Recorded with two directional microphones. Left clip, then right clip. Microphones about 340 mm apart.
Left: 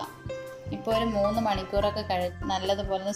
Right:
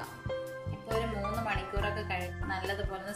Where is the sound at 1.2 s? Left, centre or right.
Centre.